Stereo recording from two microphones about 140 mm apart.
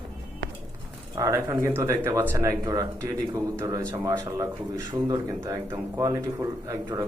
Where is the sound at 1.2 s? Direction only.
25° right (ahead or behind).